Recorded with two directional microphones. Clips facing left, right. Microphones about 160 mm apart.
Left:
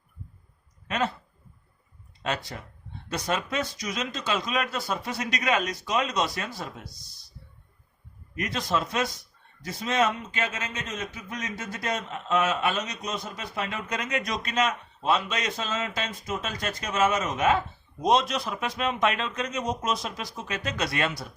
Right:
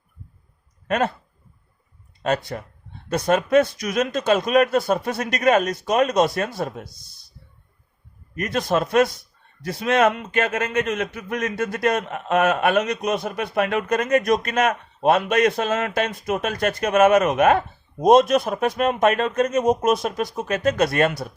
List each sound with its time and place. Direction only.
0.9 s speech: 50° right (ahead or behind)
2.2 s speech: 50° right (ahead or behind)
8.4 s a man's voice: 55° right (ahead or behind)